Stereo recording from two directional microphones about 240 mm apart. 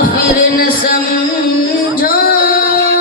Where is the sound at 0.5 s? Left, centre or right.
Left.